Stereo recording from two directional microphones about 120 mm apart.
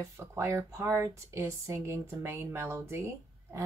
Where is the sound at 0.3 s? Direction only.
25° right (ahead or behind).